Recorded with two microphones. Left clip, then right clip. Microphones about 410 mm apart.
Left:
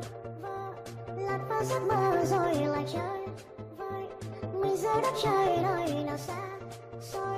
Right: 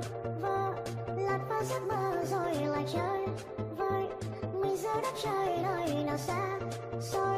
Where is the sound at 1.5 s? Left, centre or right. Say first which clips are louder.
Left 3 dB; left.